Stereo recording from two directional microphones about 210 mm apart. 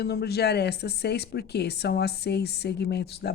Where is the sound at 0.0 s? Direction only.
50° left (ahead or behind).